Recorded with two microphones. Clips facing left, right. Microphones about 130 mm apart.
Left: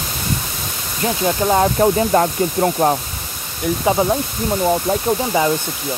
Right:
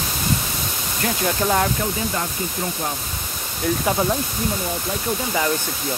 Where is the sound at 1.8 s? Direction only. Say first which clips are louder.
Left 11 dB; 60° left (ahead or behind).